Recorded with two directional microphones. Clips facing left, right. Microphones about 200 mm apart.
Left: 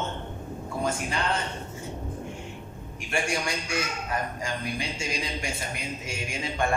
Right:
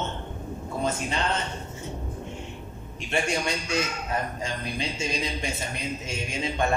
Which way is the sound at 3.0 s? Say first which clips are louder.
Right 2 dB; 25° right (ahead or behind).